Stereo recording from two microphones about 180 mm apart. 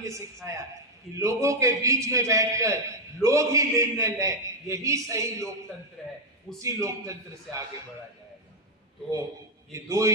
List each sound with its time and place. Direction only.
0.0 s a man's voice: 15° right (ahead or behind)
6.0 s a man's voice: centre (ahead or behind)
6.6 s a man's voice: 15° right (ahead or behind)
9.7 s a man's voice: 15° right (ahead or behind)